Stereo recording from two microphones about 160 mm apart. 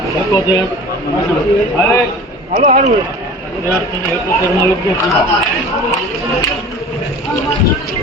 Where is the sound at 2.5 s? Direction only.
45° right (ahead or behind).